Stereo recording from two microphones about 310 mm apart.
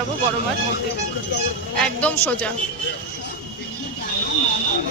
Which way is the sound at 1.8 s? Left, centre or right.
Centre.